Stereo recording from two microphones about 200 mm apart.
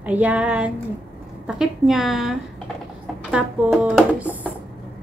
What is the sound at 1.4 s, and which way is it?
A woman's voice, 5° right (ahead or behind).